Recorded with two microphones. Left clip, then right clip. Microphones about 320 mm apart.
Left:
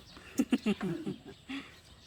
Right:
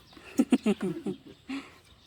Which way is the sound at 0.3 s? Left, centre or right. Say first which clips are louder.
Right 5 dB; centre.